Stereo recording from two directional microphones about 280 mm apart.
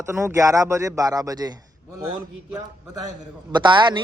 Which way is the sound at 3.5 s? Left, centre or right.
Centre.